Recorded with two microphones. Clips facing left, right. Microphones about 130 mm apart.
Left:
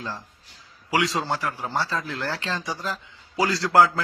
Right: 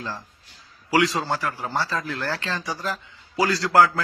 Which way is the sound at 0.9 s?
20° left (ahead or behind).